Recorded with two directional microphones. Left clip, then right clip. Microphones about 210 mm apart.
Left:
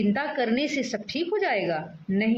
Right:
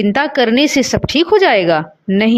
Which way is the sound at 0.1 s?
50° right (ahead or behind).